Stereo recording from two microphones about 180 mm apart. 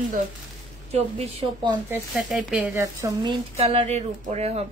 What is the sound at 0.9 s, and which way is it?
Speech, 35° right (ahead or behind).